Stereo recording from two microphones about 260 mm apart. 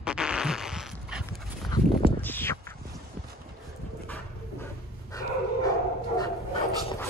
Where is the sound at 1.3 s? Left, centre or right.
Centre.